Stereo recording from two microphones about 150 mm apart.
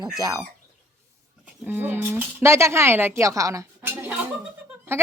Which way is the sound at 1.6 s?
10° right (ahead or behind).